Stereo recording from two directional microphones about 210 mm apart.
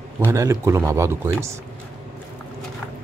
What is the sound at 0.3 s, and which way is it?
A man's voice, 15° right (ahead or behind).